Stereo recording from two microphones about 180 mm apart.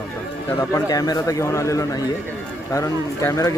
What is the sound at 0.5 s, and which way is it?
Speech, 20° left (ahead or behind).